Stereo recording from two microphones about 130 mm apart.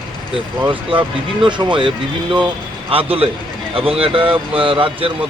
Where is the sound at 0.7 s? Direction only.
40° right (ahead or behind).